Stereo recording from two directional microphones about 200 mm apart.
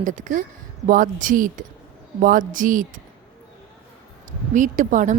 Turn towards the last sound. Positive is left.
turn(degrees=-40)  # may be behind; listen again after turning